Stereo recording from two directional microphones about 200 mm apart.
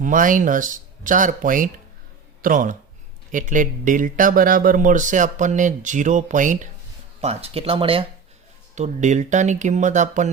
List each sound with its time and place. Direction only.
0.0 s speech: 40° right (ahead or behind)